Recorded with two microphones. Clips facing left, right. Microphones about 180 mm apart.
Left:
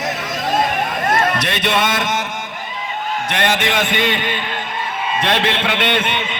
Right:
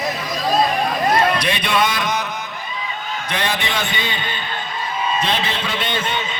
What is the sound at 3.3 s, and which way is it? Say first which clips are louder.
A man's voice: left 4 dB; 75° left (ahead or behind).